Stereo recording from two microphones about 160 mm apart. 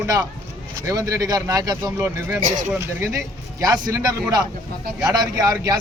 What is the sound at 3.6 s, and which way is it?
Speech, 25° right (ahead or behind).